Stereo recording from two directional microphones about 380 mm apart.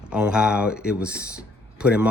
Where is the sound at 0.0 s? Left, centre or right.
Centre.